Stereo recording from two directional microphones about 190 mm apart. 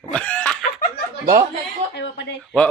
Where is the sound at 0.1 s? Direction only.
5° left (ahead or behind).